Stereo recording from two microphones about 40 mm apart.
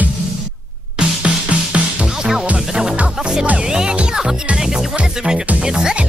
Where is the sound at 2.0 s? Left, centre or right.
Centre.